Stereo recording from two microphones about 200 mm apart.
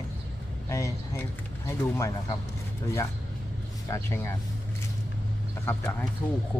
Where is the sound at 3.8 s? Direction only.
15° left (ahead or behind).